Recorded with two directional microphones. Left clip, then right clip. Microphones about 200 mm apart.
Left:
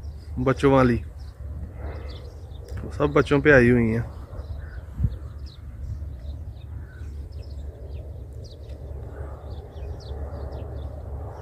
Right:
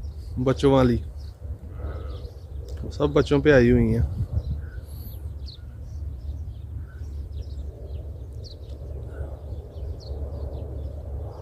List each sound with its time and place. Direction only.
0.4 s speech: 5° right (ahead or behind)
2.6 s speech: centre (ahead or behind)
10.0 s a sound: 25° left (ahead or behind)